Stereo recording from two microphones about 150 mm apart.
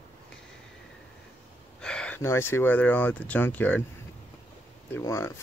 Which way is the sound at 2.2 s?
15° left (ahead or behind).